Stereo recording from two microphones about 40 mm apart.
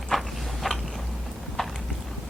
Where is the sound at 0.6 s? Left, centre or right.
Centre.